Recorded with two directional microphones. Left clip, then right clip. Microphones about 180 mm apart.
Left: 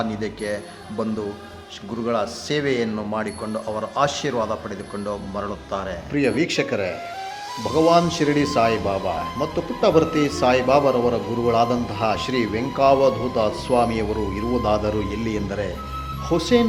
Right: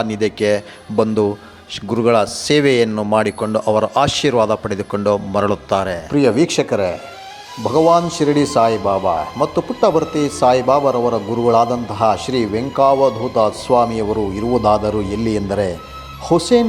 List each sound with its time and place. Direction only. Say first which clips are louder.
0.0 s a man's voice: right 9 dB; 40° right (ahead or behind)
6.1 s a man's voice: right 6 dB; 25° right (ahead or behind)